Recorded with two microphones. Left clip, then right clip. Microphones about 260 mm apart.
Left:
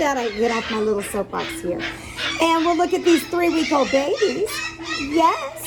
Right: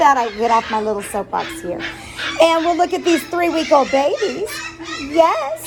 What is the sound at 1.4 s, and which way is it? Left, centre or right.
A child's voice, centre.